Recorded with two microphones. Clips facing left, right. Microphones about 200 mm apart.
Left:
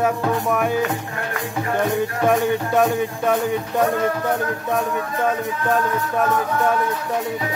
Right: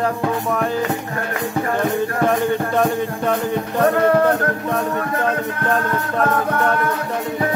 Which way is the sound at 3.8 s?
65° right (ahead or behind).